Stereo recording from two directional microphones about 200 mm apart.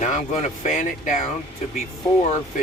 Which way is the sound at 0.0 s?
35° left (ahead or behind).